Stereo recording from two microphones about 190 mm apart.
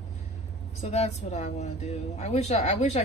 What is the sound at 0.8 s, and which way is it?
Speech, 35° left (ahead or behind).